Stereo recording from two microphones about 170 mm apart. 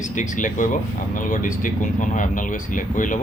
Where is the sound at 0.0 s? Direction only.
50° left (ahead or behind).